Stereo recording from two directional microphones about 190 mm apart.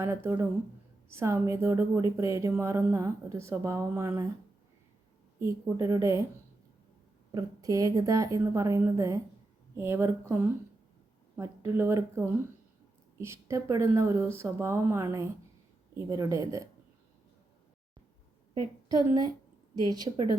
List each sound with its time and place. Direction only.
0.0 s speech: 15° right (ahead or behind)
5.4 s speech: 15° right (ahead or behind)
7.3 s speech: 20° right (ahead or behind)
19.0 s a woman's voice: 20° right (ahead or behind)